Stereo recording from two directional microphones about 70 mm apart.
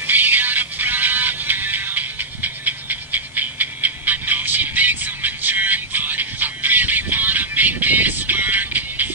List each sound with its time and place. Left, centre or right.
0.0 s music: right